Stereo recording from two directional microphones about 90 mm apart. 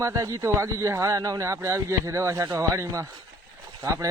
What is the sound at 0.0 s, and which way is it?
Speech, 40° right (ahead or behind).